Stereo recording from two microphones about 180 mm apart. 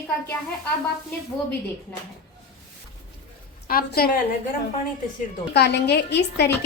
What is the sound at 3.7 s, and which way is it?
Speech, 55° left (ahead or behind).